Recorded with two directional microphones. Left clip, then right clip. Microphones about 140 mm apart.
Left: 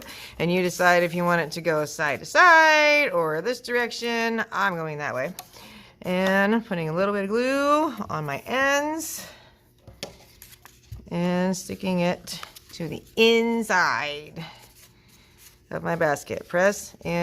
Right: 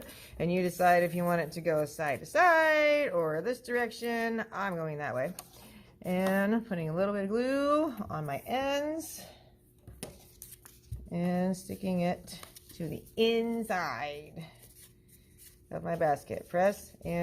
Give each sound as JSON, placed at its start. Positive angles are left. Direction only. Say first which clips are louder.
{"t": 0.0, "sound": "speech", "louder": "left 7 dB", "side_deg": 20}
{"t": 11.1, "sound": "speech", "louder": "left 7 dB", "side_deg": 30}
{"t": 15.7, "sound": "speech", "louder": "left 6 dB", "side_deg": 30}